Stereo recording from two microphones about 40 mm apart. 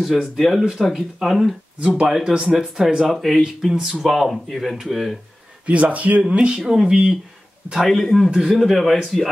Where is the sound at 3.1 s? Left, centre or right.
Centre.